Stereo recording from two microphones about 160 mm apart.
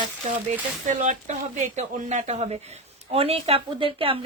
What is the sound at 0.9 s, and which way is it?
Speech, 50° right (ahead or behind).